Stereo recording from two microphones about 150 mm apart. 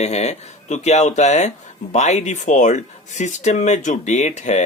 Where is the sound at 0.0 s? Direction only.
45° left (ahead or behind).